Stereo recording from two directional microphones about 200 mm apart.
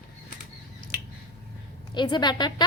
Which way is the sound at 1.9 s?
20° left (ahead or behind).